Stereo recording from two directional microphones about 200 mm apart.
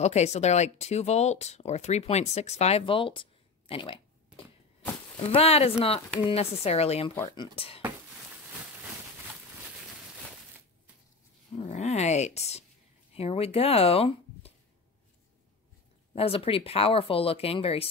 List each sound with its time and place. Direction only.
0.0 s speech: 35° left (ahead or behind)
11.5 s speech: 35° left (ahead or behind)
16.1 s speech: 30° left (ahead or behind)